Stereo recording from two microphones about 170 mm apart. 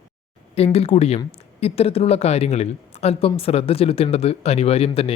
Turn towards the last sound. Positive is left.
turn(degrees=35)  # may be behind; listen again after turning